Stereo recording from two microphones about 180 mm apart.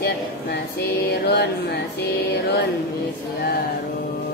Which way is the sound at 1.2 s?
60° left (ahead or behind).